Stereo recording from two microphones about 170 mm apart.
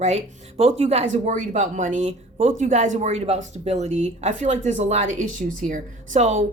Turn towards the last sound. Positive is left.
turn(degrees=-45)  # may be behind; listen again after turning